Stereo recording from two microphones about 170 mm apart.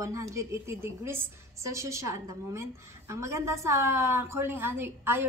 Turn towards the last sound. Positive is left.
turn(degrees=-15)  # may be behind; listen again after turning